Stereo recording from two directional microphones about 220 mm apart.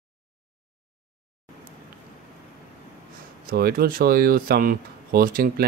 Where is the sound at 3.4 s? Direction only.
40° right (ahead or behind).